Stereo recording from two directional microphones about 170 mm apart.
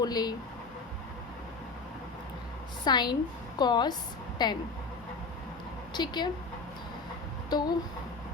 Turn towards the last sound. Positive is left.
turn(degrees=25)  # may be behind; listen again after turning